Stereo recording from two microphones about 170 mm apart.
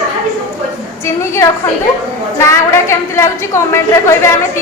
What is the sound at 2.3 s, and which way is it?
A woman's voice, 15° left (ahead or behind).